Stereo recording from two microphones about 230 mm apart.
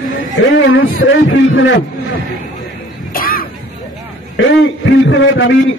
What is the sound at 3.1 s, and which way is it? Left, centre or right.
Music, left.